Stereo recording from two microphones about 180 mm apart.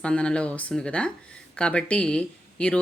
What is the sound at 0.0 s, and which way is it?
Speech, 5° left (ahead or behind).